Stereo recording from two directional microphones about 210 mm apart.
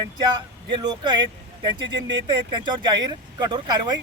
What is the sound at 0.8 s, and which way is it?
Speech, 20° right (ahead or behind).